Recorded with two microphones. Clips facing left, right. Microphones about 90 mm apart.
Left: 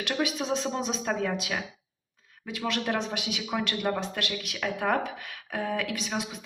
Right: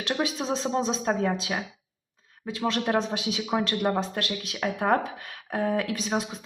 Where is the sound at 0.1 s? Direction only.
30° right (ahead or behind).